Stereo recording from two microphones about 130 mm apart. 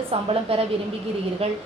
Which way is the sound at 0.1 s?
50° right (ahead or behind).